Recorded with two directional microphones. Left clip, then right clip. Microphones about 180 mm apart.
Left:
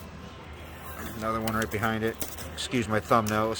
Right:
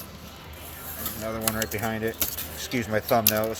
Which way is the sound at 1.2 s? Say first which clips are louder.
Left 1 dB; 15° left (ahead or behind).